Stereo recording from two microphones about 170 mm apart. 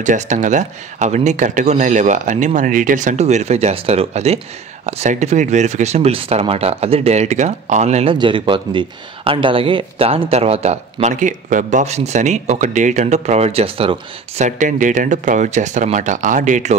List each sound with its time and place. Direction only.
0.0 s speech: 45° right (ahead or behind)